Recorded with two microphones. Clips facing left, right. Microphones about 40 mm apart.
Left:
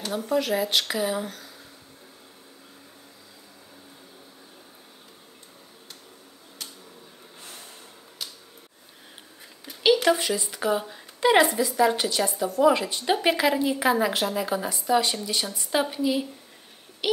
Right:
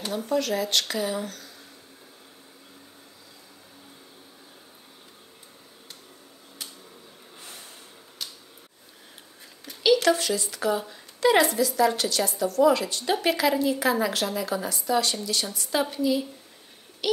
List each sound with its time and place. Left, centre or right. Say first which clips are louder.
0.1 s speech: left 1 dB; centre
10.0 s a woman's voice: even; left
17.0 s a sound: even; left